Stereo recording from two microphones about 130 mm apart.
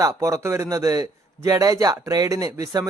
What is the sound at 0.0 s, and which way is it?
A man's voice, 25° right (ahead or behind).